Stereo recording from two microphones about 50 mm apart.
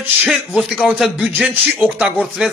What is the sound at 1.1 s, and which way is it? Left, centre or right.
Speech, centre.